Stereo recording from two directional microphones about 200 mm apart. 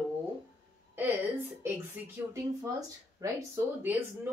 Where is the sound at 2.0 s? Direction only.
10° right (ahead or behind).